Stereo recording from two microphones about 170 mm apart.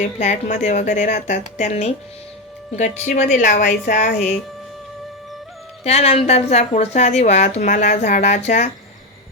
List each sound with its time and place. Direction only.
0.0 s a woman's voice: 45° left (ahead or behind)
3.0 s a woman's voice: 45° left (ahead or behind)
5.8 s a woman's voice: 40° left (ahead or behind)